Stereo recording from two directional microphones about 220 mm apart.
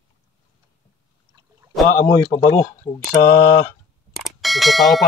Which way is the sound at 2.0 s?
20° left (ahead or behind).